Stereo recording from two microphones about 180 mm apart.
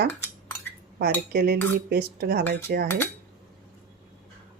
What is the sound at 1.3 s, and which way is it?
Speech, 60° right (ahead or behind).